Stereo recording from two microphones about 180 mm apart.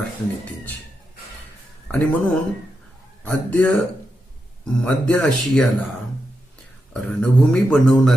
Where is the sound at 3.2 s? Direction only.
10° left (ahead or behind).